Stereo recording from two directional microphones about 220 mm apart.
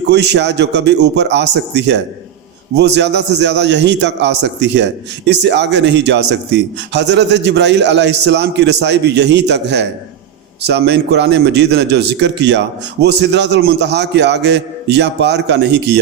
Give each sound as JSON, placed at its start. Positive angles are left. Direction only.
{"t": 0.1, "sound": "a man's voice", "side_deg": -50}